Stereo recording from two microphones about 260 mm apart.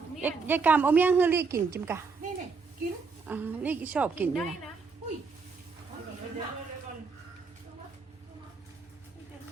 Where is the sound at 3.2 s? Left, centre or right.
Centre.